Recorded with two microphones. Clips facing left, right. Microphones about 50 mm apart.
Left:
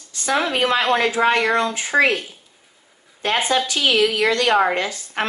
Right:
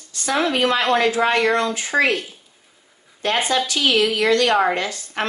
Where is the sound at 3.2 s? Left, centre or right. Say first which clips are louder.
Even; left.